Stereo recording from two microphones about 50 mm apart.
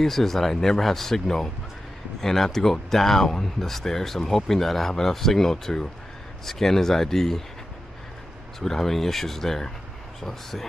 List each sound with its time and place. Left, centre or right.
0.0 s speech: centre
8.5 s speech: centre